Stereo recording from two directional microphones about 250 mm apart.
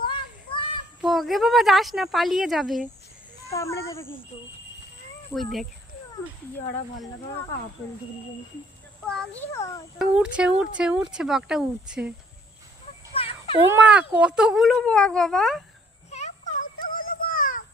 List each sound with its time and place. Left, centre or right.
0.0 s children playing: centre
1.0 s speech: centre
3.5 s a child's voice: centre
5.3 s speech: centre
9.0 s a child's voice: centre
10.2 s speech: centre
13.1 s dog: left
13.7 s speech: centre
16.0 s a sound: left